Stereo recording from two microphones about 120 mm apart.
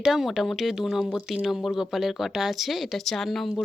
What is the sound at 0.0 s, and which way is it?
Speech, 5° right (ahead or behind).